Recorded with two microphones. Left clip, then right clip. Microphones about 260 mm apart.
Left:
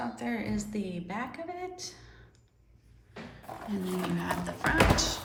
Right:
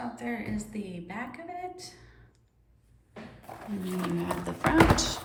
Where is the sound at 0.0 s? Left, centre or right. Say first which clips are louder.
Left 1 dB; centre.